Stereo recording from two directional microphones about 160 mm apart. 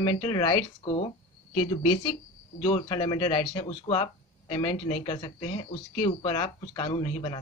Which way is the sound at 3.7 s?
40° left (ahead or behind).